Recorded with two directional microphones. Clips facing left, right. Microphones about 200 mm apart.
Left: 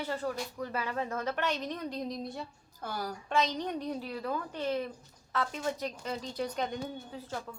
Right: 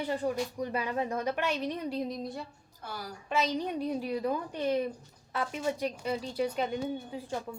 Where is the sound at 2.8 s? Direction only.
45° left (ahead or behind).